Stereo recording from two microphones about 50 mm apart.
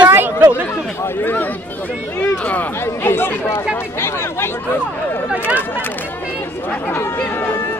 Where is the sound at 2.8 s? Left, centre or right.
Left.